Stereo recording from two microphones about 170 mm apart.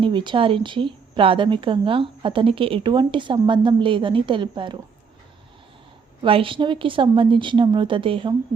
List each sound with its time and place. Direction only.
0.0 s speech: 30° right (ahead or behind)
6.2 s speech: 30° right (ahead or behind)